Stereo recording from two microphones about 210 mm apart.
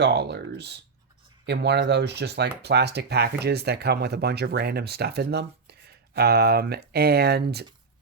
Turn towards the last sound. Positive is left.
turn(degrees=-50)  # may be behind; listen again after turning